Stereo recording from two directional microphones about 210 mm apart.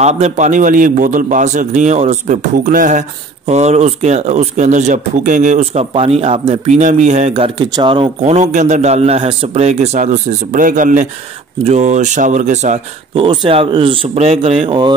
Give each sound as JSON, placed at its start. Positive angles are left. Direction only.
{"t": 0.0, "sound": "a man's voice", "side_deg": -35}